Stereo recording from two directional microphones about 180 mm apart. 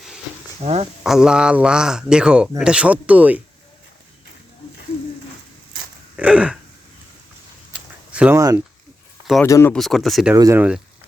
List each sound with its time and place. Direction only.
0.6 s speech: 35° right (ahead or behind)
1.0 s a man's voice: 5° right (ahead or behind)
6.1 s speech: 5° right (ahead or behind)
7.7 s a sound: 5° right (ahead or behind)
8.4 s speech: 20° right (ahead or behind)
9.4 s speech: 15° left (ahead or behind)
9.7 s a man's voice: centre (ahead or behind)
10.3 s speech: 20° right (ahead or behind)